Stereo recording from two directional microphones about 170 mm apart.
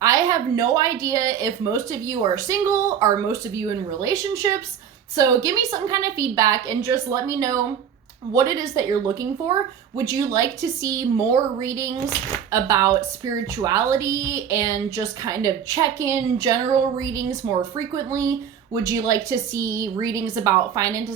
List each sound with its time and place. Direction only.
0.0 s a woman's voice: 20° right (ahead or behind)